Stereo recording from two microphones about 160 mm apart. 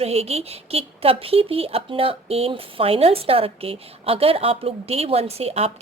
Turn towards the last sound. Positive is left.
turn(degrees=-40)  # may be behind; listen again after turning